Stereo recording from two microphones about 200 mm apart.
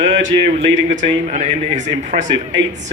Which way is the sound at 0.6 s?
30° right (ahead or behind).